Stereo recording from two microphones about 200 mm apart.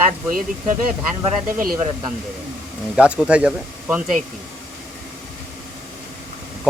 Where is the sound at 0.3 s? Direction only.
45° right (ahead or behind).